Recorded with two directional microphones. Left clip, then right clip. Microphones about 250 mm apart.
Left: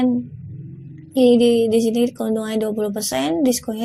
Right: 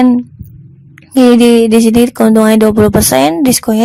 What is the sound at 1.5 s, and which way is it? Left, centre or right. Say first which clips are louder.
Speech: right 9 dB; right.